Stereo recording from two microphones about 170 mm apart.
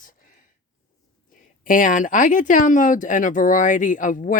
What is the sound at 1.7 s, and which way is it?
Speech, 50° left (ahead or behind).